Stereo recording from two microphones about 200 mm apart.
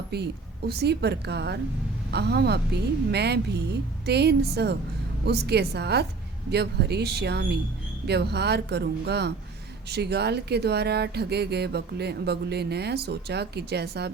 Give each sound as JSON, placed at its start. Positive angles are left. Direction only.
{"t": 0.1, "sound": "speech", "side_deg": -55}